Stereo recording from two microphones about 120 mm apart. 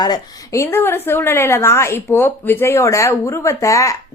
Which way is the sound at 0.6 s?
20° left (ahead or behind).